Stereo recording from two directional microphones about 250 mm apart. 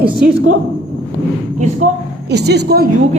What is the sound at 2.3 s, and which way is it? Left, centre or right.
Speech, right.